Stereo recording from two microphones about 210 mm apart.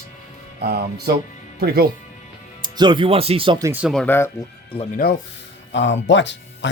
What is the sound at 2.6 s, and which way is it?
Speech, 20° right (ahead or behind).